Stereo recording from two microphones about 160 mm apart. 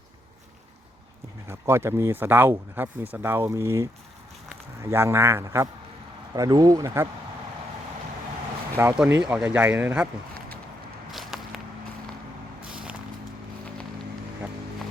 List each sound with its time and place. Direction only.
1.5 s speech: 15° right (ahead or behind)
9.0 s speech: 10° right (ahead or behind)
11.1 s walk: centre (ahead or behind)
12.7 s vehicle: 5° right (ahead or behind)